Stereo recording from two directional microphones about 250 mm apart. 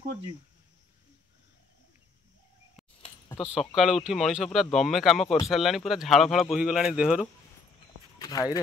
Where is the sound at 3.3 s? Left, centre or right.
Centre.